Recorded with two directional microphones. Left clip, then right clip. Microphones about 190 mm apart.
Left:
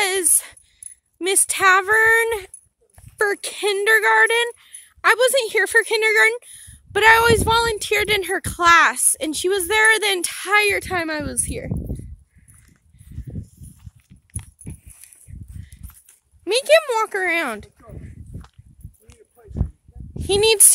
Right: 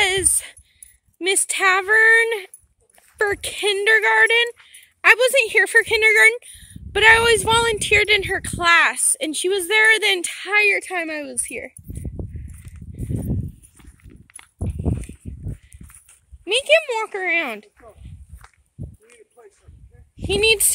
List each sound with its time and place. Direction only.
0.0 s a sound: 10° left (ahead or behind)
1.1 s speech: 10° left (ahead or behind)
16.4 s speech: 35° left (ahead or behind)
20.2 s speech: 30° left (ahead or behind)